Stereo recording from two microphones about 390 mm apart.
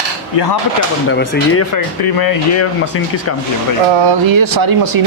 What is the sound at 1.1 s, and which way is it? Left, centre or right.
Speech, left.